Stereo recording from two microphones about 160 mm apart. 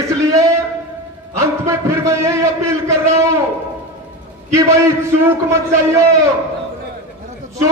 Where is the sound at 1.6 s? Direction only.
20° right (ahead or behind).